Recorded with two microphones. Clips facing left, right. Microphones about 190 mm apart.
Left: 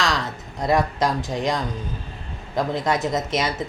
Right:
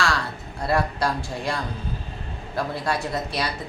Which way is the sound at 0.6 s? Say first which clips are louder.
Left 3 dB; 20° left (ahead or behind).